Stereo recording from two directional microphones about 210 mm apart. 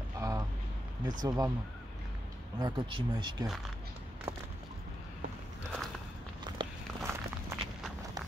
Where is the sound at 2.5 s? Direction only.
20° right (ahead or behind).